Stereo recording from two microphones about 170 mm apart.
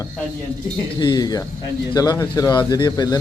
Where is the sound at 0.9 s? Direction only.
25° left (ahead or behind).